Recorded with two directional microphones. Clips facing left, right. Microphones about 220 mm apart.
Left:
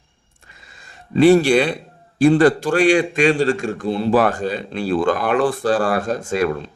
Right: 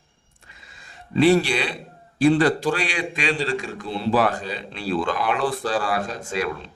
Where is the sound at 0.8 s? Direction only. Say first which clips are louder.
Left 5 dB; 45° left (ahead or behind).